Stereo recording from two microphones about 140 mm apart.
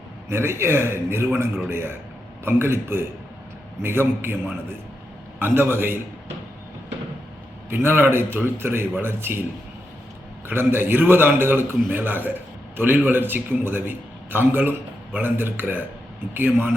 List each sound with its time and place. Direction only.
0.3 s a man's voice: 15° right (ahead or behind)
7.7 s a man's voice: 15° right (ahead or behind)
10.5 s a man's voice: 15° right (ahead or behind)